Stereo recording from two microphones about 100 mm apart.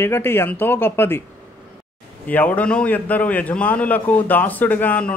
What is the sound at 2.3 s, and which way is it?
A man's voice, 15° left (ahead or behind).